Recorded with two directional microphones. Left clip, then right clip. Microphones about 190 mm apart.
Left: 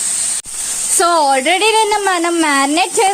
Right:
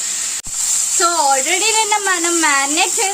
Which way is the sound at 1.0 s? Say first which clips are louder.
Left 4 dB; 50° left (ahead or behind).